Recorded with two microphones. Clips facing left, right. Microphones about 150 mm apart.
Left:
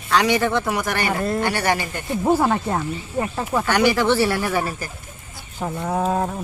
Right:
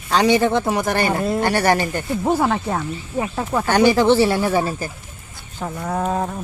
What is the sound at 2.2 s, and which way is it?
Speech, 5° left (ahead or behind).